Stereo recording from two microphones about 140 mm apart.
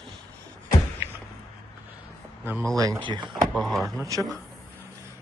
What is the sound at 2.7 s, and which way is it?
Speech, 25° right (ahead or behind).